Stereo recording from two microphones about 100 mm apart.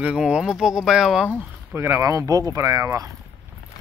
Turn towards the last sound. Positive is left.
turn(degrees=-35)  # may be behind; listen again after turning